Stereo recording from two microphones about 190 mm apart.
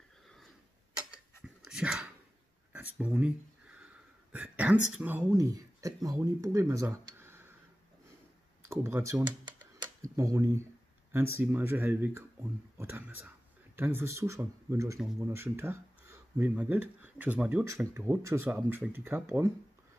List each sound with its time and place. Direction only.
1.1 s dog: 5° right (ahead or behind)
2.7 s a sound: 10° right (ahead or behind)
4.9 s speech: 10° right (ahead or behind)
8.6 s speech: 15° right (ahead or behind)